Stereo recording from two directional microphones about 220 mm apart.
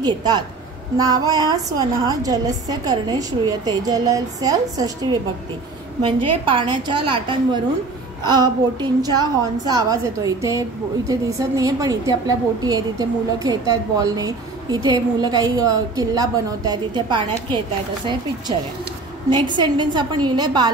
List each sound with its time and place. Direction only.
0.0 s a woman's voice: 20° right (ahead or behind)
6.4 s a woman's voice: 20° right (ahead or behind)
19.3 s a woman's voice: 20° right (ahead or behind)